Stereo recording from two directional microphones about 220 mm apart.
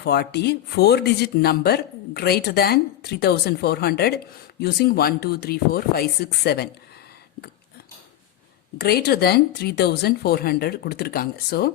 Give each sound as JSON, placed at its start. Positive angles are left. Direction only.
{"t": 0.0, "sound": "speech", "side_deg": 50}
{"t": 8.8, "sound": "speech", "side_deg": 45}